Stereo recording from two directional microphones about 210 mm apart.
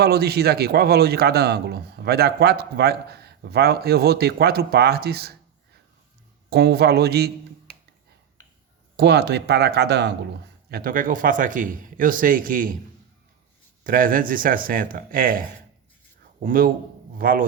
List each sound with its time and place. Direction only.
0.0 s speech: 50° right (ahead or behind)
6.5 s speech: 50° right (ahead or behind)
9.0 s a man's voice: 50° right (ahead or behind)
13.8 s a man's voice: 40° right (ahead or behind)